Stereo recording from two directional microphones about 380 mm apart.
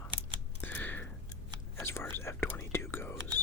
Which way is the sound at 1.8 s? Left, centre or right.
Centre.